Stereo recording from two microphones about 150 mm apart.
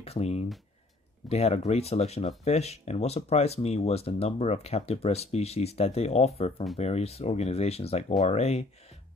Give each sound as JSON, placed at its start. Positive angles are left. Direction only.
{"t": 0.0, "sound": "speech", "side_deg": 45}